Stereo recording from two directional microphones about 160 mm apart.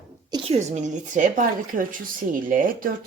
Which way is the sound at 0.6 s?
45° right (ahead or behind).